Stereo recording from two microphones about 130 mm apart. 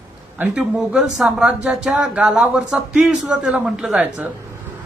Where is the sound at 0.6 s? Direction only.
Centre (ahead or behind).